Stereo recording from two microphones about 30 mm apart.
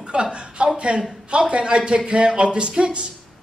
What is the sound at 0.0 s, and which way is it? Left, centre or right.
A man's voice, right.